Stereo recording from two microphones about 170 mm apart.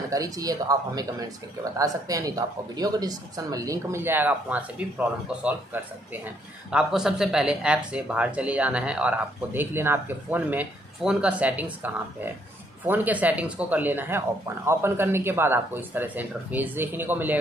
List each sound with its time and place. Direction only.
0.1 s speech: 20° right (ahead or behind)